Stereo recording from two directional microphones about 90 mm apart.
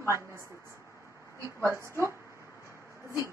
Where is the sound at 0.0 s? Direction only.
30° right (ahead or behind).